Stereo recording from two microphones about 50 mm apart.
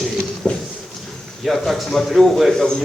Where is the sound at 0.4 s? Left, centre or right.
Centre.